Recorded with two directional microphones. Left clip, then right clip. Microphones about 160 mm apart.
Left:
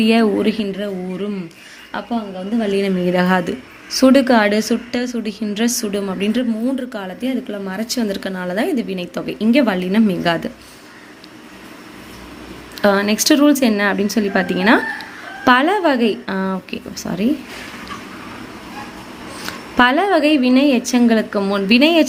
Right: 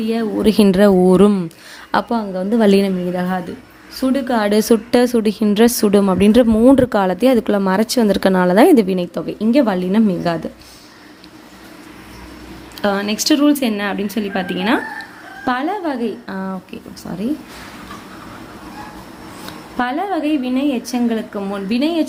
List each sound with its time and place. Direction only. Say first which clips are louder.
0.0 s a woman's voice: left 6 dB; 20° left (ahead or behind)
0.5 s a woman's voice: right 12 dB; 50° right (ahead or behind)
3.1 s a woman's voice: left 5 dB; 15° left (ahead or behind)
4.5 s a woman's voice: right 6 dB; 35° right (ahead or behind)
9.0 s a woman's voice: right 2 dB; 20° right (ahead or behind)
12.8 s a woman's voice: left 3 dB; centre (ahead or behind)
19.5 s a woman's voice: left 7 dB; 20° left (ahead or behind)